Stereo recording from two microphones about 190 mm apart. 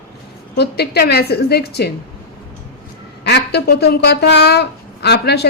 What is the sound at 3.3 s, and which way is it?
A woman's voice, 60° left (ahead or behind).